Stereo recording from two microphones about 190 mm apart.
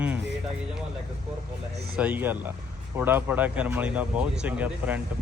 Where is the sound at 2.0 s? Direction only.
10° right (ahead or behind).